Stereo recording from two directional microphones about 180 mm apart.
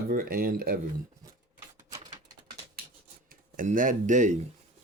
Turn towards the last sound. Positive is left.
turn(degrees=-40)  # may be behind; listen again after turning